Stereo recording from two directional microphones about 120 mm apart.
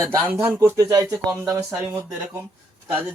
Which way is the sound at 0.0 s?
15° right (ahead or behind).